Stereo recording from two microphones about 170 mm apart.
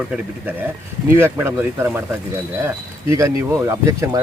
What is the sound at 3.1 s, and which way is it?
Speech, 20° right (ahead or behind).